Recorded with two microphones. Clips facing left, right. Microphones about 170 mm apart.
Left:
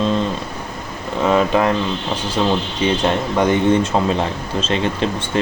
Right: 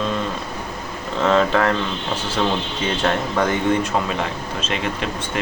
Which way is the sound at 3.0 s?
20° left (ahead or behind).